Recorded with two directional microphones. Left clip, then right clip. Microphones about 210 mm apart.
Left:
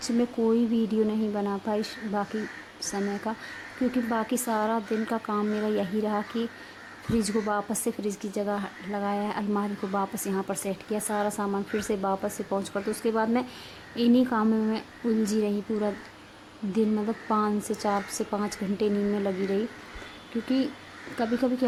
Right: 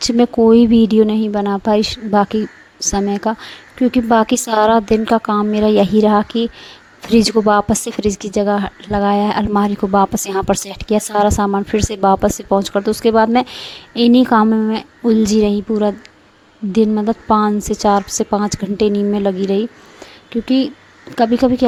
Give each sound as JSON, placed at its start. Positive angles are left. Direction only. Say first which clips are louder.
{"t": 0.0, "sound": "a woman's voice", "louder": "right 14 dB", "side_deg": -40}
{"t": 21.2, "sound": "a woman's voice", "louder": "right 14 dB", "side_deg": -40}